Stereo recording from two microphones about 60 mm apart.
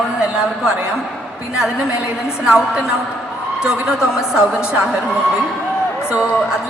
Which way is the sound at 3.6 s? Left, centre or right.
Centre.